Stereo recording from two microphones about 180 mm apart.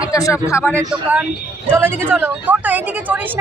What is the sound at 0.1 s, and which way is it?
Speech, 15° left (ahead or behind).